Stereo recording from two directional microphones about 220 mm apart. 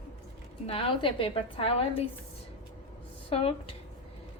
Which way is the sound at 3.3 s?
25° left (ahead or behind).